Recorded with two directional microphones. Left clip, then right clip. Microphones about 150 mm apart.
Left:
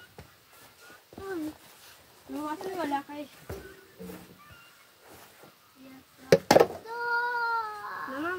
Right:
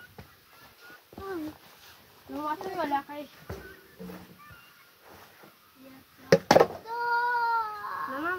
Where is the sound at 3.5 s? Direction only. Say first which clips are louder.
Left 1 dB; 50° left (ahead or behind).